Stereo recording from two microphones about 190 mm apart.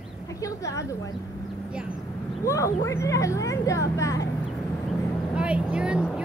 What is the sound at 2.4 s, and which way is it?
Speech, 15° left (ahead or behind).